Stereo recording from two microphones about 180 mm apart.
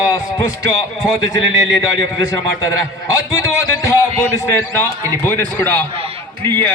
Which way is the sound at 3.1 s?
15° left (ahead or behind).